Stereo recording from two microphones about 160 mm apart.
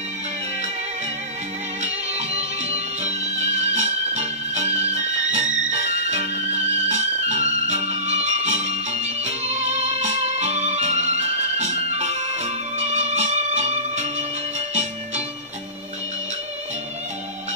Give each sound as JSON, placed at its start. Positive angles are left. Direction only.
{"t": 1.8, "sound": "music", "side_deg": -40}